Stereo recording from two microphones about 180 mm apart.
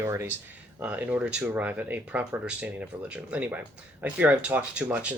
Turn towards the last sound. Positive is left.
turn(degrees=-5)  # may be behind; listen again after turning